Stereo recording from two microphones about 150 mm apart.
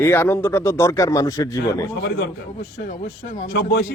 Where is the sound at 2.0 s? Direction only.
90° left.